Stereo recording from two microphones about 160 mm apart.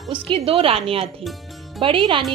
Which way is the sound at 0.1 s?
35° right (ahead or behind).